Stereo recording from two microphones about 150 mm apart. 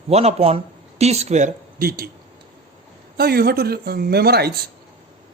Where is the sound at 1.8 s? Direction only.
85° right.